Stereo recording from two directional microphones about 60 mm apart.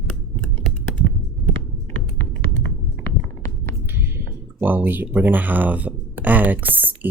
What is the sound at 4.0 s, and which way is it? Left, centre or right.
Speech, right.